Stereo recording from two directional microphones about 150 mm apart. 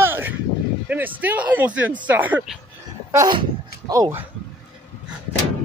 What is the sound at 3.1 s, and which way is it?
Speech, 30° right (ahead or behind).